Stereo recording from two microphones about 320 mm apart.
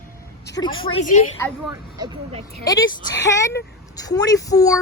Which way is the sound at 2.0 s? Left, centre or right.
Centre.